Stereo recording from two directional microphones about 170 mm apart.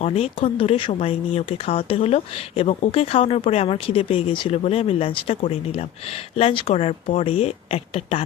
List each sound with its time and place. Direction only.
0.0 s speech: 40° left (ahead or behind)